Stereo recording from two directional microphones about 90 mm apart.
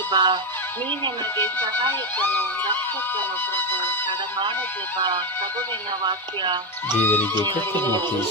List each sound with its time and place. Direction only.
0.1 s speech: 60° right (ahead or behind)
1.9 s music: 20° left (ahead or behind)
6.1 s speech: 60° right (ahead or behind)
7.0 s music: 20° left (ahead or behind)